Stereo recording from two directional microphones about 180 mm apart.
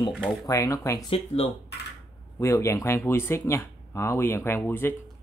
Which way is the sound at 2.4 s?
15° left (ahead or behind).